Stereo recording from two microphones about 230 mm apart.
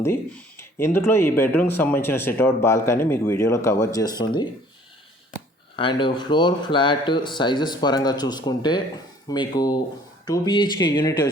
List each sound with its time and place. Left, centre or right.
0.0 s speech: centre
5.7 s speech: left